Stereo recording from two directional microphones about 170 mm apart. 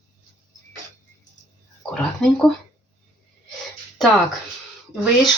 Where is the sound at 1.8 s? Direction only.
5° left (ahead or behind).